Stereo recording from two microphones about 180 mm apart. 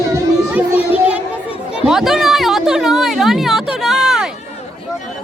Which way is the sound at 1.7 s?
5° right (ahead or behind).